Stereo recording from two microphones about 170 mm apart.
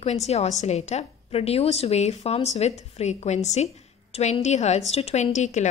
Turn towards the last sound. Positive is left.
turn(degrees=45)  # may be behind; listen again after turning